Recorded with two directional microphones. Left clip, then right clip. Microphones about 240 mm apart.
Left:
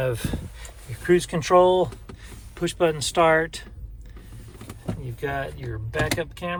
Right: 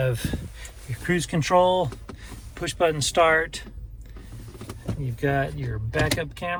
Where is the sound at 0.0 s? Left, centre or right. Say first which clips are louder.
Left 1 dB; left.